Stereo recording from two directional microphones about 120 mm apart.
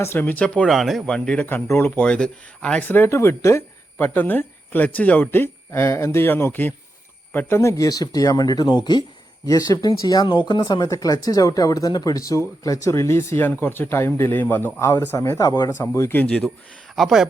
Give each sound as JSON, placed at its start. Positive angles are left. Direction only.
{"t": 0.0, "sound": "speech", "side_deg": 15}
{"t": 2.0, "sound": "speech", "side_deg": 10}
{"t": 15.8, "sound": "speech", "side_deg": 20}
{"t": 16.9, "sound": "speech", "side_deg": 0}